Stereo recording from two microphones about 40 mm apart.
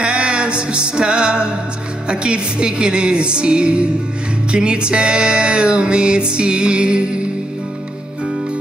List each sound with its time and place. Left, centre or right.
0.0 s music: right